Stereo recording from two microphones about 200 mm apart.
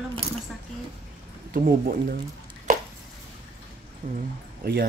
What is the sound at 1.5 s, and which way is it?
Speech, 45° right (ahead or behind).